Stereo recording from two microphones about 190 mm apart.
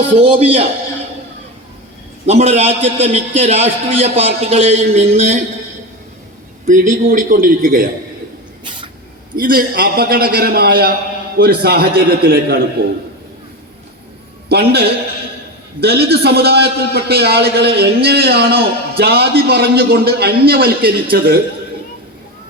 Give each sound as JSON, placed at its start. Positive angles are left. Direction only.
{"t": 0.2, "sound": "a man's voice", "side_deg": -30}
{"t": 2.2, "sound": "a man's voice", "side_deg": -35}
{"t": 6.7, "sound": "a man's voice", "side_deg": -40}
{"t": 9.3, "sound": "a man's voice", "side_deg": -50}
{"t": 14.5, "sound": "a man's voice", "side_deg": -55}